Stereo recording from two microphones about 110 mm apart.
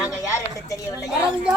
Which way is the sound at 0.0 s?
30° left (ahead or behind).